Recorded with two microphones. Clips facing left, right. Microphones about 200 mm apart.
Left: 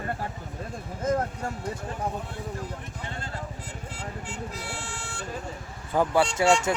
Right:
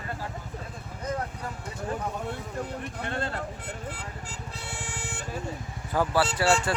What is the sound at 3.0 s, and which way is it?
Vehicle, 60° right (ahead or behind).